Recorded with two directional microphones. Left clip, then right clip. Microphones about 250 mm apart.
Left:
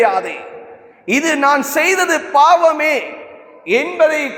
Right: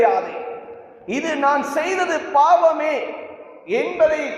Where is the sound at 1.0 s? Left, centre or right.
Left.